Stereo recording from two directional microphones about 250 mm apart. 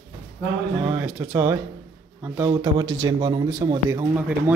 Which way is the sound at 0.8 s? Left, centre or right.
Centre.